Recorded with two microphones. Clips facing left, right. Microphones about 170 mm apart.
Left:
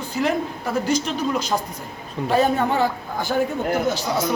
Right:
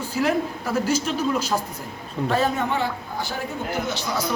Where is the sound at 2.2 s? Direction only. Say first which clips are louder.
Even; centre (ahead or behind).